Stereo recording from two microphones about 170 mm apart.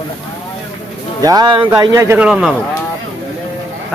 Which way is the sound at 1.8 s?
15° right (ahead or behind).